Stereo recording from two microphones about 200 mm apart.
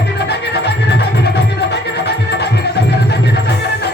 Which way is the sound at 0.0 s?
55° left (ahead or behind).